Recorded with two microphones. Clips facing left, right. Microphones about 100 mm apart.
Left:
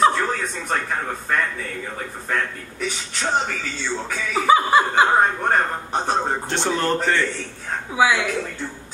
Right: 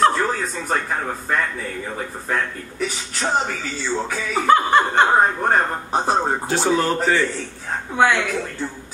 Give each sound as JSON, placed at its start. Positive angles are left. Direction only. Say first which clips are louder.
{"t": 0.0, "sound": "speech", "louder": "right 1 dB", "side_deg": 0}
{"t": 3.2, "sound": "speech", "louder": "right 1 dB", "side_deg": 0}